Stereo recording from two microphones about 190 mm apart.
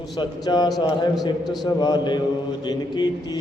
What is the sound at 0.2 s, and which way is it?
Mantra, 20° left (ahead or behind).